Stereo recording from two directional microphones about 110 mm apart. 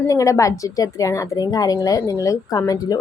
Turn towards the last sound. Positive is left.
turn(degrees=35)  # may be behind; listen again after turning